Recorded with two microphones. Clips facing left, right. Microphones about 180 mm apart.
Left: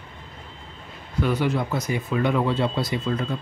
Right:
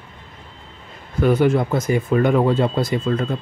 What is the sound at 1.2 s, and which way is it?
Speech, 50° right (ahead or behind).